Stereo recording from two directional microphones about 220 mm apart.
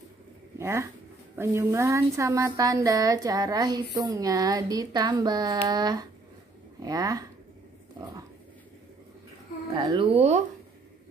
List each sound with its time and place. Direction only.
0.6 s speech: 10° right (ahead or behind)
9.8 s speech: 20° right (ahead or behind)